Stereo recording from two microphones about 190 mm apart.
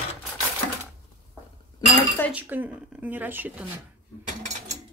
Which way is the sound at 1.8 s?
20° left (ahead or behind).